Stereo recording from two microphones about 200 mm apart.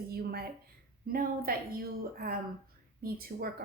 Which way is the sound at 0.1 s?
50° right (ahead or behind).